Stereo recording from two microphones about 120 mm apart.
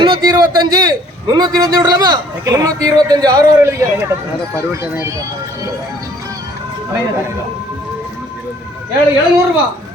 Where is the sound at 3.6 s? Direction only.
20° right (ahead or behind).